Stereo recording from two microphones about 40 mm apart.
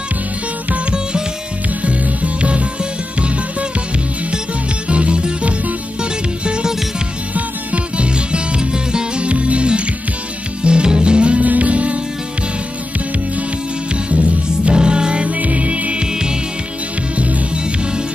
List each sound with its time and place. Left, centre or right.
1.8 s music: right
4.8 s music: right
7.3 s music: right
8.1 s music: right
11.4 s music: right
14.1 s music: right
15.2 s music: right
16.1 s music: centre
17.2 s music: right